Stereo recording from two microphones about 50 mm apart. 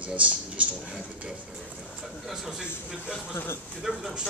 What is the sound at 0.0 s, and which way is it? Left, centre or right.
Speech, right.